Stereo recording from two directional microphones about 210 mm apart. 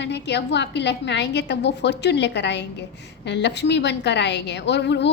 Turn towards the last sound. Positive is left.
turn(degrees=55)  # may be behind; listen again after turning